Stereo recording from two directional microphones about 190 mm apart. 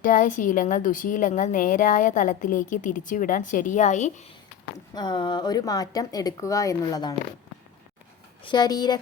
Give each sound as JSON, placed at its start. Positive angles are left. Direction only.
{"t": 0.0, "sound": "a woman's voice", "side_deg": 45}
{"t": 4.9, "sound": "a woman's voice", "side_deg": 25}
{"t": 8.4, "sound": "a woman's voice", "side_deg": 20}